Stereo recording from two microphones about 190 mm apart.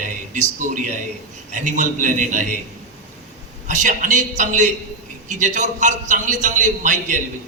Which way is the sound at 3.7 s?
40° right (ahead or behind).